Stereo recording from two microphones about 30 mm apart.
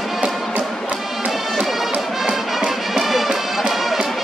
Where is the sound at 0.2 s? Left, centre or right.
Right.